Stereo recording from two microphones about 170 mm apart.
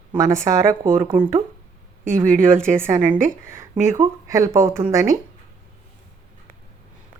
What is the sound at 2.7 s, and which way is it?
Speech, 15° right (ahead or behind).